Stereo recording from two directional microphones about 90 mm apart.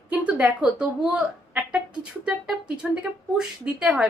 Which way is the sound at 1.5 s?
15° right (ahead or behind).